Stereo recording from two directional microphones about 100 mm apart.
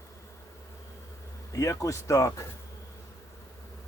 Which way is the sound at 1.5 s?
30° left (ahead or behind).